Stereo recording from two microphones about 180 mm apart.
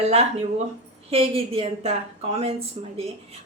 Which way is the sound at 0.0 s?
35° right (ahead or behind).